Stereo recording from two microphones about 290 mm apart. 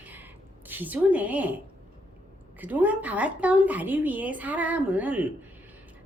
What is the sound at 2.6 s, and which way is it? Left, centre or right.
A woman's voice, centre.